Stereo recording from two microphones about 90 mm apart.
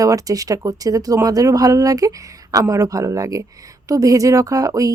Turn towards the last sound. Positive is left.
turn(degrees=-40)  # may be behind; listen again after turning